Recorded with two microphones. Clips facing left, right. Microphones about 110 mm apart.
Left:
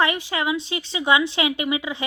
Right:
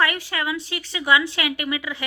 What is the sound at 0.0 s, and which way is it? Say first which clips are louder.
Speech: left 2 dB; 20° left (ahead or behind).